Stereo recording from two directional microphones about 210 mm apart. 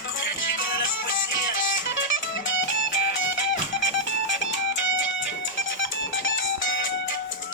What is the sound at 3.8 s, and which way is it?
Music, 55° left (ahead or behind).